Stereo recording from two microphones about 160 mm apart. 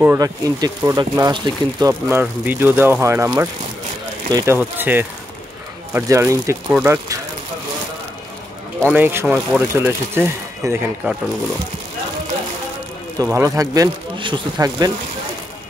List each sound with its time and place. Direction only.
0.0 s speech: 20° right (ahead or behind)
4.6 s speech: 10° right (ahead or behind)
8.8 s speech: 10° right (ahead or behind)
13.2 s speech: 20° right (ahead or behind)